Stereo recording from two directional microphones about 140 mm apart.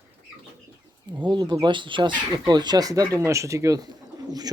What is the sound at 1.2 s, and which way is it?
Speech, 35° right (ahead or behind).